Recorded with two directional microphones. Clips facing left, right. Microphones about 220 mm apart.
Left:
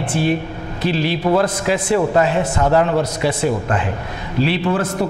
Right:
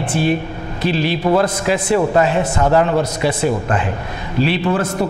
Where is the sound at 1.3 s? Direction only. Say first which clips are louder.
Right 1 dB; 25° right (ahead or behind).